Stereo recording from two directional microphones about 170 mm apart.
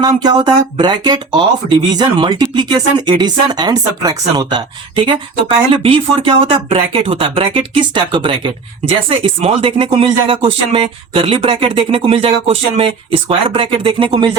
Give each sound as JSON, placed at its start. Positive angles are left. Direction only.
{"t": 0.0, "sound": "speech", "side_deg": -25}